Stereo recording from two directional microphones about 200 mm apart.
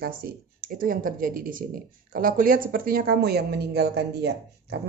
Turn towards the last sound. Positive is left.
turn(degrees=-55)  # may be behind; listen again after turning